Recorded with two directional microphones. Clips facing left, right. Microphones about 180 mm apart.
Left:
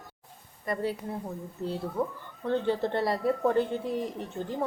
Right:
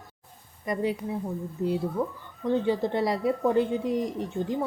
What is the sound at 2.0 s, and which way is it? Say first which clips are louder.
Speech: right 1 dB; 10° left (ahead or behind).